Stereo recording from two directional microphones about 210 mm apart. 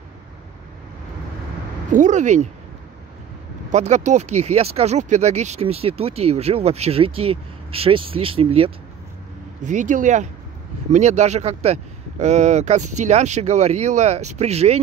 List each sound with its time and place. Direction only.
1.9 s speech: 35° right (ahead or behind)
3.7 s speech: 35° right (ahead or behind)